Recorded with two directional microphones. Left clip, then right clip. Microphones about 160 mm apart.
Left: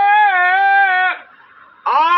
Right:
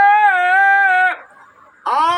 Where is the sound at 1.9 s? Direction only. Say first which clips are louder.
Left 1 dB; 10° right (ahead or behind).